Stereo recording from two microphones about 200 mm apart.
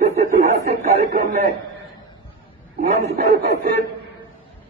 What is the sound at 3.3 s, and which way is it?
Speech, 55° right (ahead or behind).